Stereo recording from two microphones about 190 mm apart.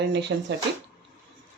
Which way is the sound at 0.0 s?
65° right (ahead or behind).